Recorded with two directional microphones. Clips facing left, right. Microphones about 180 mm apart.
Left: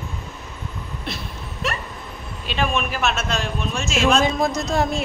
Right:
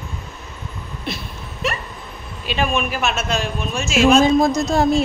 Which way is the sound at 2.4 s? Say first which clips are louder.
Right 2 dB; 5° right (ahead or behind).